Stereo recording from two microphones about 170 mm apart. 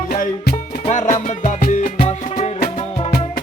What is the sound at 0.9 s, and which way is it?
Music, 45° left (ahead or behind).